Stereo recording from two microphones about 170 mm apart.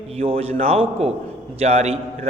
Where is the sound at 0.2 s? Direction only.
35° right (ahead or behind).